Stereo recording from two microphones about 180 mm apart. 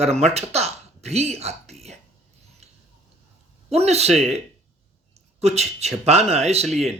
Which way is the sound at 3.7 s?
35° right (ahead or behind).